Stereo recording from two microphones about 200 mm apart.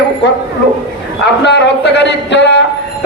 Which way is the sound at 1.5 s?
60° left (ahead or behind).